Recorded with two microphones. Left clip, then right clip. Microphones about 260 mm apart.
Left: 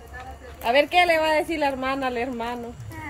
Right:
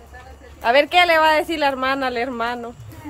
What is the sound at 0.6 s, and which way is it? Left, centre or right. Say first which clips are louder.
Speech: right 4 dB; centre.